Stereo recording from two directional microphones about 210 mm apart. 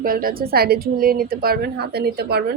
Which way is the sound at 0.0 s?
45° right (ahead or behind).